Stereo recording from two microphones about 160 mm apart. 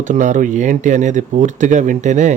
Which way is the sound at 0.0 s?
50° right (ahead or behind).